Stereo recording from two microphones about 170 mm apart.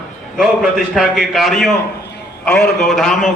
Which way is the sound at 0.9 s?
Centre (ahead or behind).